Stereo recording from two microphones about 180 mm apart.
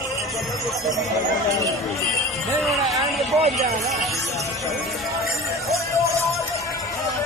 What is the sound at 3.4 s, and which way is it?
Speech, 35° right (ahead or behind).